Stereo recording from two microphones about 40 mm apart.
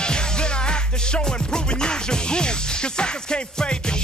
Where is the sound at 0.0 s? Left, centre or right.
Left.